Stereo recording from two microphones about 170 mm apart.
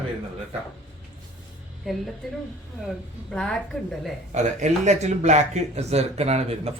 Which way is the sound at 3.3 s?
5° left (ahead or behind).